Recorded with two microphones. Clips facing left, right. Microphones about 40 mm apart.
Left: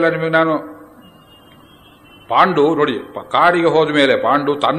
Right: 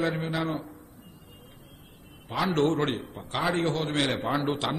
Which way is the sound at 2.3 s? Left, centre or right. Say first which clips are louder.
Left 13 dB; left.